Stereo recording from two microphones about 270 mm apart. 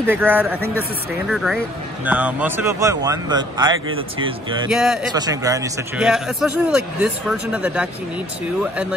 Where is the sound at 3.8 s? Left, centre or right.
Right.